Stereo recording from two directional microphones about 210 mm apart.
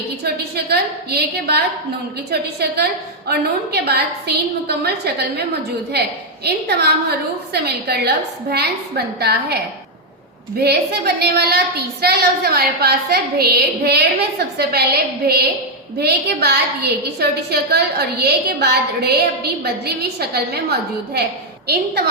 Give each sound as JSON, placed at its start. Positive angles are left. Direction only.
{"t": 0.5, "sound": "a woman's voice", "side_deg": -50}
{"t": 3.2, "sound": "a woman's voice", "side_deg": -50}
{"t": 6.4, "sound": "a woman's voice", "side_deg": -50}
{"t": 10.6, "sound": "a woman's voice", "side_deg": -50}